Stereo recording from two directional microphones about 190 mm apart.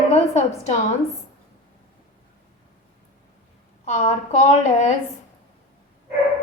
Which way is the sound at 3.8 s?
35° left (ahead or behind).